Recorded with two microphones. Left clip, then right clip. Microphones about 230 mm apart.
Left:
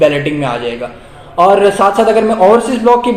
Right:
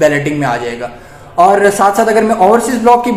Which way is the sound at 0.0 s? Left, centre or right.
Right.